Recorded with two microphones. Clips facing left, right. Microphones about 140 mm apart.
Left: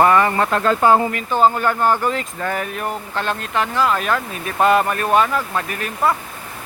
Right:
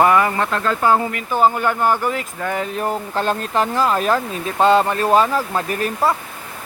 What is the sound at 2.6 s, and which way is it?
Speech, 30° right (ahead or behind).